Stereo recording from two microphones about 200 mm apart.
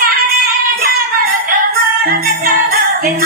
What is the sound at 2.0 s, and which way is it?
Music, 45° right (ahead or behind).